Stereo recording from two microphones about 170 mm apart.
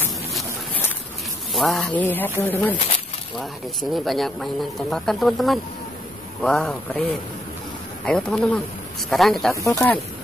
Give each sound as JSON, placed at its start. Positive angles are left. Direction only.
{"t": 1.5, "sound": "speech", "side_deg": 0}
{"t": 3.9, "sound": "speech", "side_deg": 0}
{"t": 9.5, "sound": "speech", "side_deg": 15}